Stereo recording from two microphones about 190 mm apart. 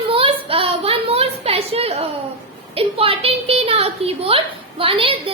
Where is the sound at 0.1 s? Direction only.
30° right (ahead or behind).